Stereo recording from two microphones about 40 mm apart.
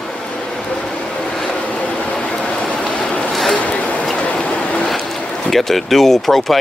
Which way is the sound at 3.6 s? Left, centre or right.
Left.